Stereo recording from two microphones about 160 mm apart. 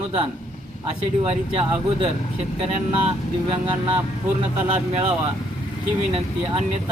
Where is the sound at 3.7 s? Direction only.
35° right (ahead or behind).